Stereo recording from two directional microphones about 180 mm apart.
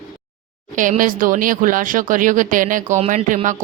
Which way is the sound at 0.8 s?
50° right (ahead or behind).